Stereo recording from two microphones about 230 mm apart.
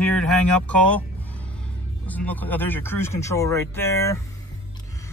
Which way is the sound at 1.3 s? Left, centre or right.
Centre.